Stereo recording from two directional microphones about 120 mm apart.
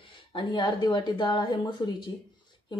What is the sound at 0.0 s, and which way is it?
Speech, 45° left (ahead or behind).